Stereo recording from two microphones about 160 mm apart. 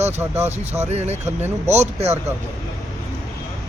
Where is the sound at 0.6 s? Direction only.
40° right (ahead or behind).